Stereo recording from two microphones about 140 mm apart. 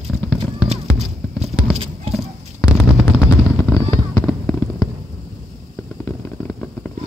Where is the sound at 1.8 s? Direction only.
40° right (ahead or behind).